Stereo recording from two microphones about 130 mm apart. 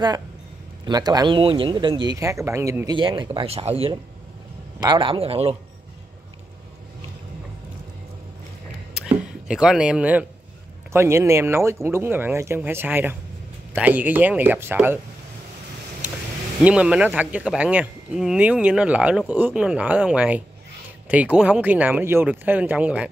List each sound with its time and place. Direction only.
0.8 s speech: 30° right (ahead or behind)
2.9 s speech: 40° right (ahead or behind)
3.3 s speech: 50° right (ahead or behind)
4.7 s speech: 35° right (ahead or behind); by 5.6 s 50° right (ahead or behind)
8.9 s a sound: 5° right (ahead or behind)
10.9 s speech: 20° right (ahead or behind)
16.6 s speech: 10° right (ahead or behind)